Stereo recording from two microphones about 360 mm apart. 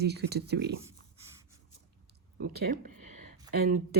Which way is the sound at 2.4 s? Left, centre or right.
Right.